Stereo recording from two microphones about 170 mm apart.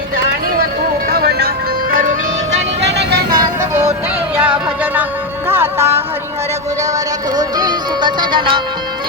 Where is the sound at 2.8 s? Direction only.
80° right; by 3.7 s 60° right (ahead or behind).